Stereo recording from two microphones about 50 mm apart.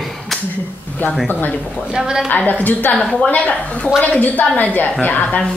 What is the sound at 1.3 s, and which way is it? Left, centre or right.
Speech, left.